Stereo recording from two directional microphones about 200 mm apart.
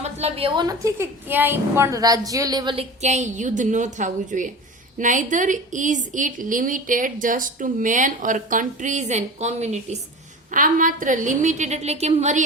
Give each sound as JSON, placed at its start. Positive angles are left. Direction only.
{"t": 0.0, "sound": "a woman's voice", "side_deg": -30}
{"t": 3.0, "sound": "a woman's voice", "side_deg": -35}